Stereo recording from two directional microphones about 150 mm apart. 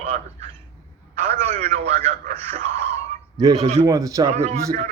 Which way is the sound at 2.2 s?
55° right (ahead or behind).